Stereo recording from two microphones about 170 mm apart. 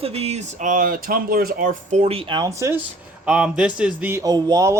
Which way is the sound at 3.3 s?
5° right (ahead or behind).